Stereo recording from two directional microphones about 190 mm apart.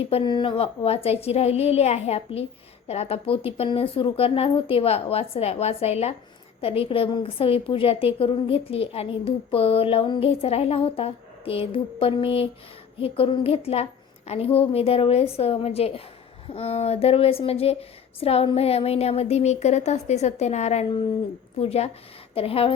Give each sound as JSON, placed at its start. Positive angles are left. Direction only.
{"t": 0.1, "sound": "a woman's voice", "side_deg": 25}